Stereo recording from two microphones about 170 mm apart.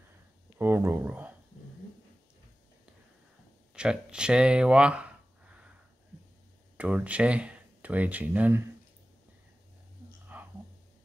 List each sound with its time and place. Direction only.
0.6 s speech: 15° right (ahead or behind)
3.7 s speech: 5° right (ahead or behind)
6.8 s speech: 10° right (ahead or behind)
10.3 s whispering: 10° right (ahead or behind)